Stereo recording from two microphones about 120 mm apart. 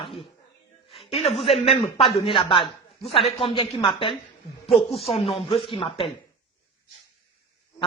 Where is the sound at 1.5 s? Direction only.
55° left (ahead or behind).